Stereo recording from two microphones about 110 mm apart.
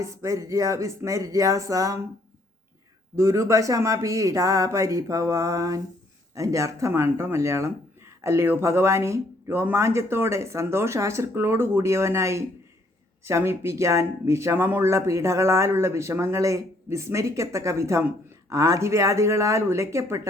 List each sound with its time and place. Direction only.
0.0 s speech: 25° right (ahead or behind)
3.2 s speech: 25° right (ahead or behind)